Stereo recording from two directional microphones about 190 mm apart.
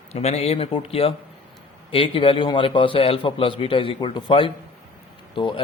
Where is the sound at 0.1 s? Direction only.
35° left (ahead or behind).